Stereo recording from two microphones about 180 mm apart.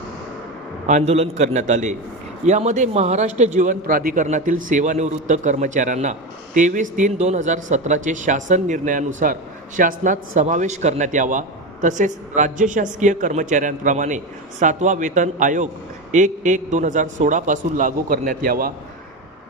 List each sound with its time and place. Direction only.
0.9 s a man's voice: 40° right (ahead or behind)